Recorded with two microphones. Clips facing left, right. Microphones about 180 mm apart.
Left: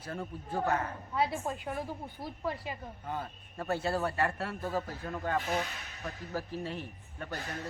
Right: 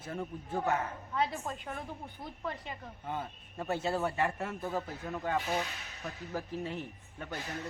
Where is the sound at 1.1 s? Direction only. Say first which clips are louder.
Left 2 dB; 10° left (ahead or behind).